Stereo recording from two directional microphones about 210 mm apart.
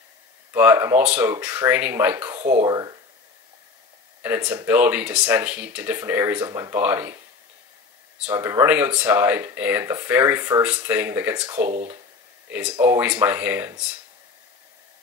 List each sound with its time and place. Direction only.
0.5 s speech: 10° right (ahead or behind)
4.2 s speech: 5° right (ahead or behind)
8.2 s speech: 10° right (ahead or behind)
12.4 s speech: 5° right (ahead or behind)